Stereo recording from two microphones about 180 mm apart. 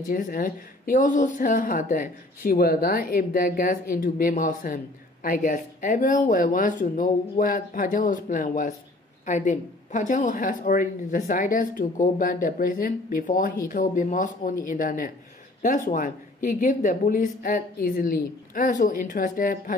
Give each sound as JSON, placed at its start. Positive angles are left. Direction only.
{"t": 0.1, "sound": "speech", "side_deg": 55}